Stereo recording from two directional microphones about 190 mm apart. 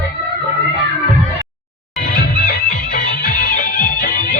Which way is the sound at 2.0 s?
50° left (ahead or behind).